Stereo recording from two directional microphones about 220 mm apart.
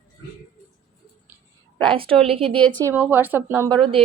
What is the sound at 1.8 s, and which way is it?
Speech, 25° right (ahead or behind).